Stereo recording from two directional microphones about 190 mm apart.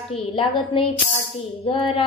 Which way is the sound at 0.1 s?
30° left (ahead or behind).